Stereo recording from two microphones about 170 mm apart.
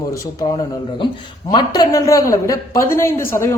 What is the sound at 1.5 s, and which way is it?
A man's voice, 25° left (ahead or behind).